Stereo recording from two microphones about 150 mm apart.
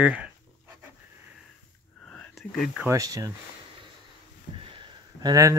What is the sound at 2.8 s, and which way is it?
Speech, 20° right (ahead or behind).